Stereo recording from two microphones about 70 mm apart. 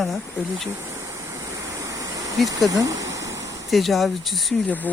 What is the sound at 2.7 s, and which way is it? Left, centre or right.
Speech, right.